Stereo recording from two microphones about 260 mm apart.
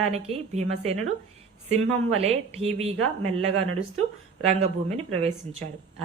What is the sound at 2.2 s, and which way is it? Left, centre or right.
Speech, right.